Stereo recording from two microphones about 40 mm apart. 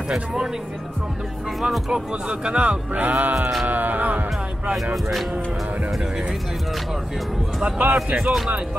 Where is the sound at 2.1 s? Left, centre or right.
Right.